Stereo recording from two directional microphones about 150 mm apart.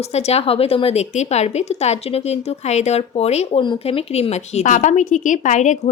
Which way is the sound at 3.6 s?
35° left (ahead or behind).